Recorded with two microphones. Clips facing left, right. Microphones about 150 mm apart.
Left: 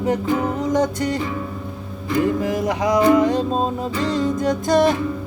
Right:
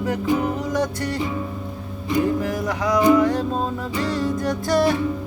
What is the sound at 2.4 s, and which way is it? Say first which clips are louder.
Music: left 3 dB; 20° left (ahead or behind).